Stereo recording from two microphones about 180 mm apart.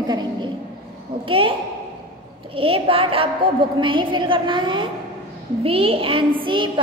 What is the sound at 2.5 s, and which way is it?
A woman's voice, 30° right (ahead or behind).